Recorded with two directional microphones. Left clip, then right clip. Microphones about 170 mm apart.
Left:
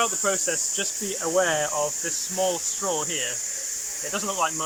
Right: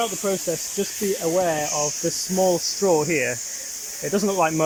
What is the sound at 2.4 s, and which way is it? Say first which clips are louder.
Speech: right 6 dB; 40° right (ahead or behind).